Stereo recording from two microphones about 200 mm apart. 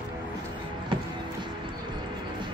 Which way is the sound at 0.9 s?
25° right (ahead or behind).